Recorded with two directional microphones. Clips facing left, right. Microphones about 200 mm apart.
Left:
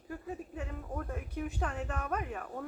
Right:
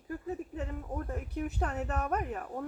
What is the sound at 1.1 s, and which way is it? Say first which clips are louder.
Speech: right 2 dB; 40° right (ahead or behind).